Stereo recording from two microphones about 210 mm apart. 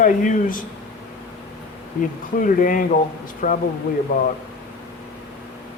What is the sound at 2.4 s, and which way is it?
Speech, 40° left (ahead or behind).